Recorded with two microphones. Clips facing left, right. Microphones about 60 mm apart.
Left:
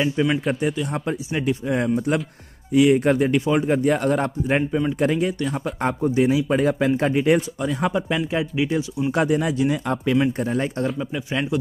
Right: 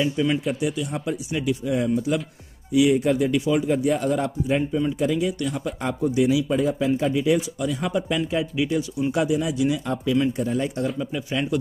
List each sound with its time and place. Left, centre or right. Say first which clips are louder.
0.0 s speech: left 1 dB; left
0.5 s speech: left 2 dB; left
2.7 s a man's voice: left 2 dB; left
5.4 s a man's voice: left 3 dB; left
7.6 s speech: left 2 dB; left
9.1 s a man's voice: left 3 dB; left
11.0 s speech: left 1 dB; centre